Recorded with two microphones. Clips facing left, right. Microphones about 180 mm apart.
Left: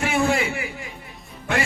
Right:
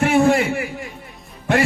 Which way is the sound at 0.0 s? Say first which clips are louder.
Right 6 dB; 55° right (ahead or behind).